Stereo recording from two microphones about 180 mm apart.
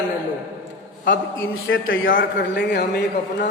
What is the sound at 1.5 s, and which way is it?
A man's voice, 90° left.